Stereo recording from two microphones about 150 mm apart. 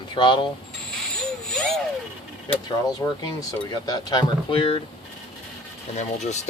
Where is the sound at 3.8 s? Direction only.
25° left (ahead or behind).